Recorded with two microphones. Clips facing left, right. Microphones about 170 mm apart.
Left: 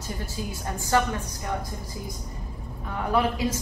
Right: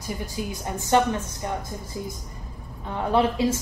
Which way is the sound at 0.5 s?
20° right (ahead or behind).